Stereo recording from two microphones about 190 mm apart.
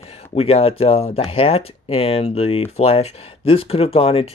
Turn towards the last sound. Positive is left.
turn(degrees=30)  # may be behind; listen again after turning